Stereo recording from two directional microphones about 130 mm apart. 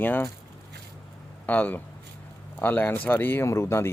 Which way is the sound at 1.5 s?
15° left (ahead or behind).